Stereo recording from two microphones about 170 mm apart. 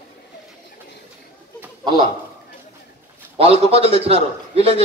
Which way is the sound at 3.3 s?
35° right (ahead or behind).